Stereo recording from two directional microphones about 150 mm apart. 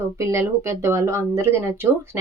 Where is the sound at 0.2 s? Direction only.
20° right (ahead or behind).